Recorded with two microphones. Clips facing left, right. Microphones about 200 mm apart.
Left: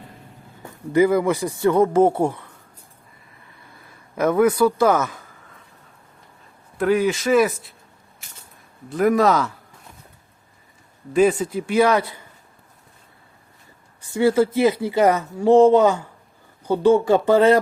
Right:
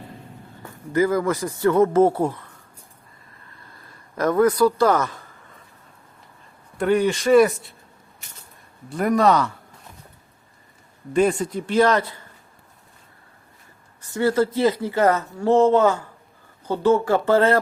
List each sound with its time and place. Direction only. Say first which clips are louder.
0.6 s speech: left 3 dB; 15° left (ahead or behind)
3.8 s speech: left 2 dB; 10° left (ahead or behind)
6.7 s speech: left 1 dB; centre (ahead or behind)
8.9 s speech: left 1 dB; centre (ahead or behind)
11.1 s speech: left 2 dB; 5° left (ahead or behind)
14.1 s speech: left 3 dB; 10° left (ahead or behind)